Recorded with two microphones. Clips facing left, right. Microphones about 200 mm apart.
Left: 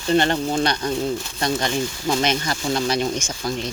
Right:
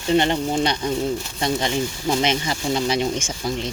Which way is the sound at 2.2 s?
20° right (ahead or behind).